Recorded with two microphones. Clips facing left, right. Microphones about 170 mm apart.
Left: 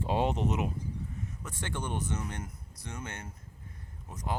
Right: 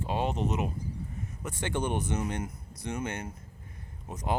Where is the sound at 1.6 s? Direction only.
20° right (ahead or behind).